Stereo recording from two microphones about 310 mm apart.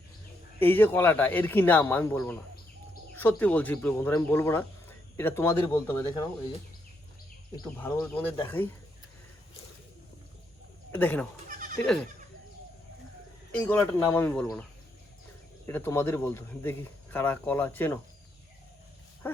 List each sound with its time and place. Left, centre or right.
0.6 s speech: centre
7.5 s speech: centre
10.9 s speech: centre
11.4 s goat: right
13.7 s speech: centre
15.6 s speech: centre
19.2 s speech: centre